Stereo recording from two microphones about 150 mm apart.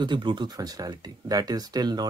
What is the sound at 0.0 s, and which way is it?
Speech, 30° right (ahead or behind).